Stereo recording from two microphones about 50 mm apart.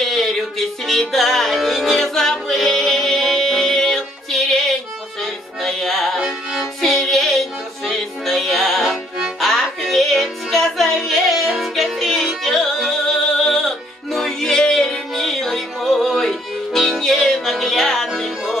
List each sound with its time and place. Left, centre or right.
0.0 s music: centre
6.2 s music: centre
6.8 s music: centre